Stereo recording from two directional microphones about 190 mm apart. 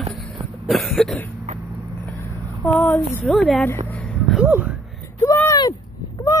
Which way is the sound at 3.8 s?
5° left (ahead or behind).